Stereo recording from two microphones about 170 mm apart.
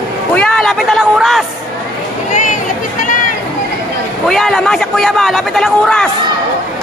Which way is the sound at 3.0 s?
50° left (ahead or behind).